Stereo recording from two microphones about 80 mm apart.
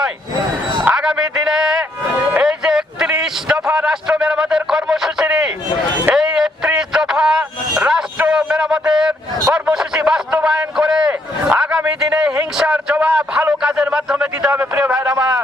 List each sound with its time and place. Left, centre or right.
0.9 s a man's voice: centre
2.4 s a sound: centre
14.8 s a man's voice: centre